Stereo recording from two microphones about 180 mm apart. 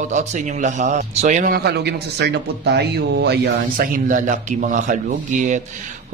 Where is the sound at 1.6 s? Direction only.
65° right (ahead or behind); by 5.6 s 45° right (ahead or behind).